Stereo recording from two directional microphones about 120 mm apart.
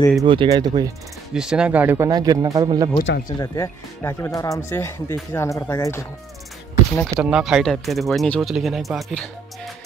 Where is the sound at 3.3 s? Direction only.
30° left (ahead or behind).